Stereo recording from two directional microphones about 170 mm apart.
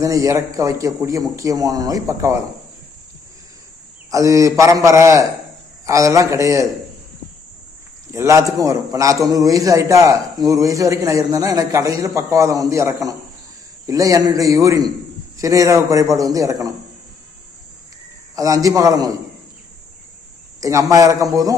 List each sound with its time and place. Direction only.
0.0 s a man's voice: 20° right (ahead or behind)
4.1 s a man's voice: 20° right (ahead or behind)
8.1 s a man's voice: 15° right (ahead or behind)
18.3 s a man's voice: 20° right (ahead or behind)
20.6 s a man's voice: 20° right (ahead or behind)